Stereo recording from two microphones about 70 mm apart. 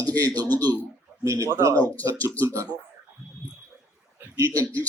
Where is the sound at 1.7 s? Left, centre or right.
Left.